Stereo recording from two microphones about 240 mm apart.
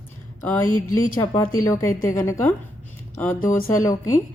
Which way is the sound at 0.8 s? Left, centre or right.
Left.